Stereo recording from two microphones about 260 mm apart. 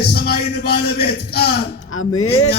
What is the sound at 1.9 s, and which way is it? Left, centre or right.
Speech, left.